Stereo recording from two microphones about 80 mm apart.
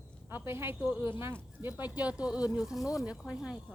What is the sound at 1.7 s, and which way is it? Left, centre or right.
Speech, centre.